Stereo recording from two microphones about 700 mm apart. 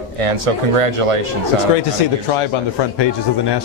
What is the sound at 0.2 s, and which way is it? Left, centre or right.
Speech, right.